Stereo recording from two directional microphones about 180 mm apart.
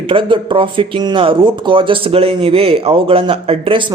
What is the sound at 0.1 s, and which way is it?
Speech, 30° right (ahead or behind).